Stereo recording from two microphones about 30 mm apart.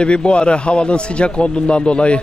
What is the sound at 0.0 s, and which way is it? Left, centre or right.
Speech, left.